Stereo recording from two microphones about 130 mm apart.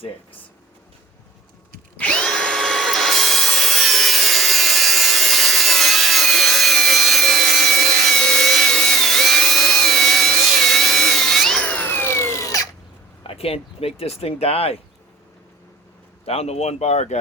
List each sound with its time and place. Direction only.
2.0 s drill: 10° left (ahead or behind); by 12.6 s 25° left (ahead or behind)
13.2 s speech: 50° left (ahead or behind)
16.2 s speech: 50° left (ahead or behind)